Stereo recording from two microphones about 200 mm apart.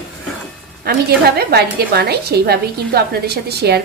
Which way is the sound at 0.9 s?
55° right (ahead or behind).